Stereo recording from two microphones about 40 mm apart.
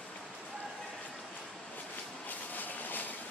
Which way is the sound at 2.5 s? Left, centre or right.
Left.